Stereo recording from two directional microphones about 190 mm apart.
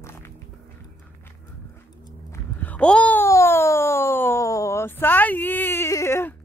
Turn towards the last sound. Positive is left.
turn(degrees=15)  # may be behind; listen again after turning